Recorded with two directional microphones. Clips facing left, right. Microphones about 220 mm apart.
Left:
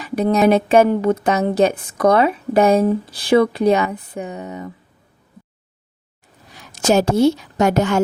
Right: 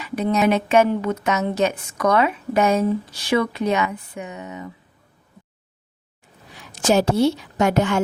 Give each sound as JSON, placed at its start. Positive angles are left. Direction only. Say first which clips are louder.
{"t": 0.0, "sound": "speech", "louder": "left 4 dB", "side_deg": 35}
{"t": 6.5, "sound": "a woman's voice", "louder": "left 2 dB", "side_deg": 45}